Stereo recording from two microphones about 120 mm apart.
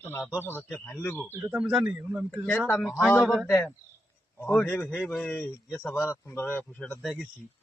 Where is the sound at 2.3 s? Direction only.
10° left (ahead or behind).